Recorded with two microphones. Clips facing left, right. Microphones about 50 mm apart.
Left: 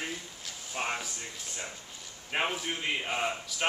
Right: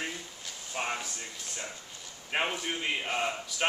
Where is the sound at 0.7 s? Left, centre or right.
Centre.